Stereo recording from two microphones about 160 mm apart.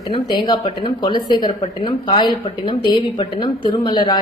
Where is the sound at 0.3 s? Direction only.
25° left (ahead or behind).